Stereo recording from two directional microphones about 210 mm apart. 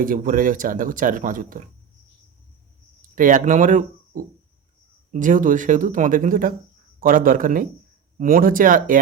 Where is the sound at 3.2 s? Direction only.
40° right (ahead or behind).